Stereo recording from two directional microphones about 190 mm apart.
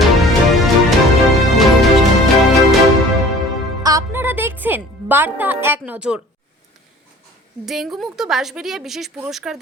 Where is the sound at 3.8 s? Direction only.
15° right (ahead or behind).